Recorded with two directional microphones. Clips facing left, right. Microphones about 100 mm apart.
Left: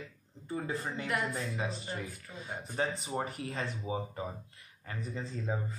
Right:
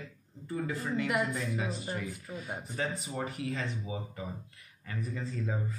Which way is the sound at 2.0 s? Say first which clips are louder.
Right 3 dB; 30° left (ahead or behind).